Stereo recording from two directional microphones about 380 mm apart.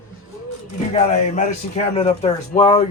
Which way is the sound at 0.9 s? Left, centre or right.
Centre.